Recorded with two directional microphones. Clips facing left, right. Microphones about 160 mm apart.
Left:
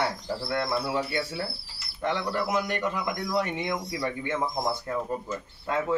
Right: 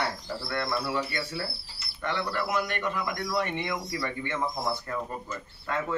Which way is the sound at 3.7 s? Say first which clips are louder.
Left 2 dB; 15° left (ahead or behind).